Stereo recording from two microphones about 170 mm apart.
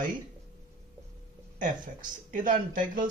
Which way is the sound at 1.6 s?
50° right (ahead or behind).